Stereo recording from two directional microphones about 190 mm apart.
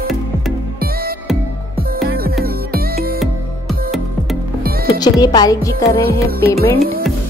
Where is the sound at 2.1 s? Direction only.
50° right (ahead or behind).